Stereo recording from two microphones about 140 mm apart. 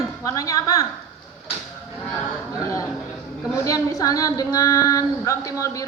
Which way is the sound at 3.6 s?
25° left (ahead or behind).